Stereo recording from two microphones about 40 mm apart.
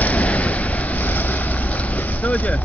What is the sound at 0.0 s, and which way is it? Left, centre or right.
Waves, left.